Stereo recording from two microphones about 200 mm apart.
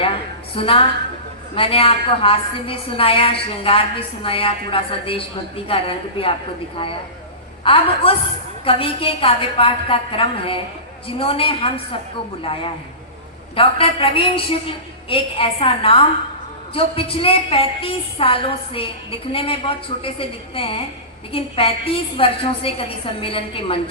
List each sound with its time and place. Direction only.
0.0 s a sound: 25° left (ahead or behind)
1.5 s a woman's voice: 25° left (ahead or behind)
7.6 s a woman's voice: 25° left (ahead or behind)